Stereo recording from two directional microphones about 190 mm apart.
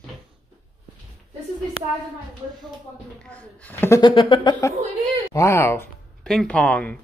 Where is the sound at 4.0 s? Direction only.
25° left (ahead or behind).